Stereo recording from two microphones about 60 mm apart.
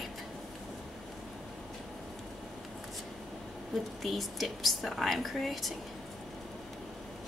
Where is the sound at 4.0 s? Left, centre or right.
Centre.